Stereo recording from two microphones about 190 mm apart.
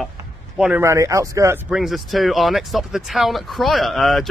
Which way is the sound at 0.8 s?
15° right (ahead or behind).